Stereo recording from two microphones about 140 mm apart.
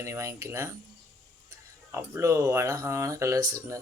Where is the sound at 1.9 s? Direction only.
20° right (ahead or behind).